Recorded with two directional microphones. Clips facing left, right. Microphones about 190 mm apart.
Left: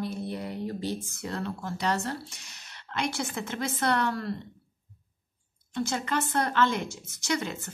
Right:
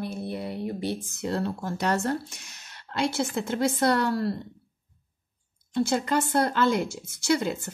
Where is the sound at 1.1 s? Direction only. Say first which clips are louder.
Right 6 dB; 25° right (ahead or behind).